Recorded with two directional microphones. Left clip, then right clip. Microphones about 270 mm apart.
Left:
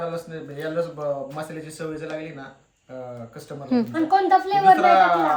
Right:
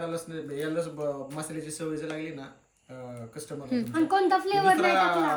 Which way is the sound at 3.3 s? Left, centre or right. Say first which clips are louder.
Left 8 dB; centre.